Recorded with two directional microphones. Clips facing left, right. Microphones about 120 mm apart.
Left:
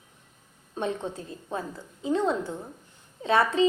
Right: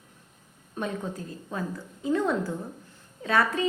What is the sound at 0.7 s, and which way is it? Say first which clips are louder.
A woman's voice: left 2 dB; 25° left (ahead or behind).